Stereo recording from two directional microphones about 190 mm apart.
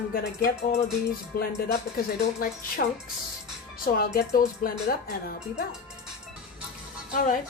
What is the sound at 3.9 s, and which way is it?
Speech, 50° left (ahead or behind).